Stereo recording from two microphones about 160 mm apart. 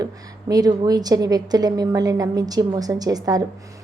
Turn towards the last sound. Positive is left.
turn(degrees=-25)  # may be behind; listen again after turning